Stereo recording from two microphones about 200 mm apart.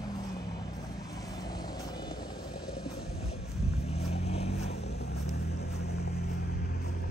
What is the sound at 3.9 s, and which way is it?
Vehicle, 30° left (ahead or behind).